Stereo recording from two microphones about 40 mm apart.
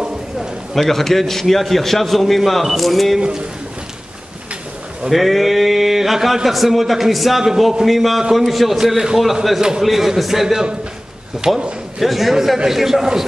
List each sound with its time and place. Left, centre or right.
0.7 s a man's voice: centre
3.2 s a man's voice: right
5.1 s a man's voice: centre
9.6 s a man's voice: centre
9.8 s a man's voice: centre